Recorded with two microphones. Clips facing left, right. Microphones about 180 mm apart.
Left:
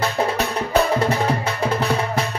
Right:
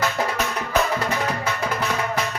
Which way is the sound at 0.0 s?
35° left (ahead or behind).